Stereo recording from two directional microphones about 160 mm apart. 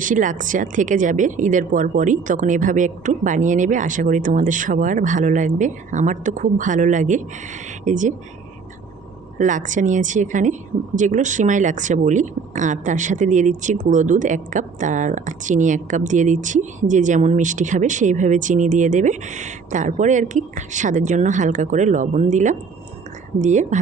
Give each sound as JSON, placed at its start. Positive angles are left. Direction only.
{"t": 0.0, "sound": "speech", "side_deg": -55}
{"t": 9.4, "sound": "speech", "side_deg": -55}